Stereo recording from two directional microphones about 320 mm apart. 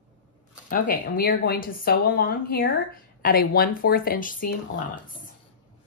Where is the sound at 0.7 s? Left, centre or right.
Left.